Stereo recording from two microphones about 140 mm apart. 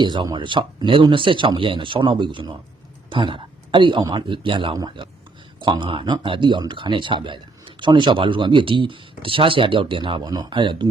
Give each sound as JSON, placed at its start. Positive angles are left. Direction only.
{"t": 0.0, "sound": "speech", "side_deg": -30}